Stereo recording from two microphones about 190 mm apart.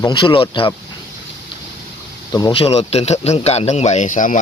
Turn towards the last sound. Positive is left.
turn(degrees=45)  # may be behind; listen again after turning